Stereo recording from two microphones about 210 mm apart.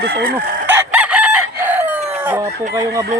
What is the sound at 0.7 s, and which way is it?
Chicken, 10° right (ahead or behind).